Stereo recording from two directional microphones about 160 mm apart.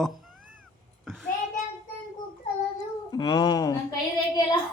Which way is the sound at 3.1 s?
30° left (ahead or behind).